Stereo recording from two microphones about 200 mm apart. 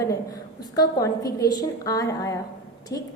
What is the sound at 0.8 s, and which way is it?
A woman's voice, 15° left (ahead or behind).